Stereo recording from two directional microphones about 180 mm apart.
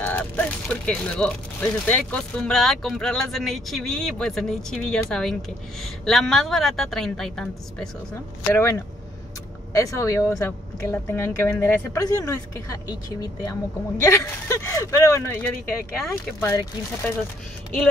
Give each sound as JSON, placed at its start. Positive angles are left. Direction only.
{"t": 0.0, "sound": "speech", "side_deg": 10}
{"t": 8.5, "sound": "speech", "side_deg": 15}